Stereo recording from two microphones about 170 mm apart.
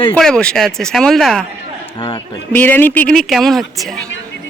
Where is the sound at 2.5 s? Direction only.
10° left (ahead or behind).